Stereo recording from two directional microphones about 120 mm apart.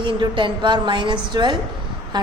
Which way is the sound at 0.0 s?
45° right (ahead or behind).